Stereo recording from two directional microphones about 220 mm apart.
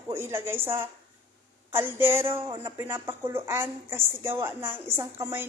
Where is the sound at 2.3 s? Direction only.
25° right (ahead or behind).